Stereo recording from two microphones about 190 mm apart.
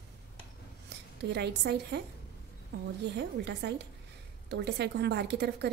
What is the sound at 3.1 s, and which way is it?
Speech, 60° right (ahead or behind).